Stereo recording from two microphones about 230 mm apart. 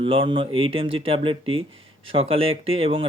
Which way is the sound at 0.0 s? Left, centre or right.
Right.